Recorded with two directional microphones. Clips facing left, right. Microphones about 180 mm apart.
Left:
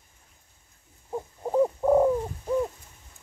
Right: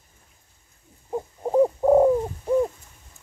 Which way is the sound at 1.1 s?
20° right (ahead or behind).